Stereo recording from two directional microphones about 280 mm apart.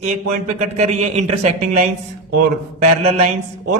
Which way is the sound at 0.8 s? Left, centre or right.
Right.